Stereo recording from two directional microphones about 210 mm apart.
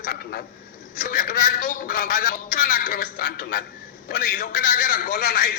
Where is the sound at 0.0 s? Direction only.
45° left (ahead or behind).